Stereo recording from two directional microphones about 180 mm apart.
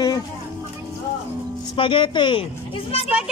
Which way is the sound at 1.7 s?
25° left (ahead or behind).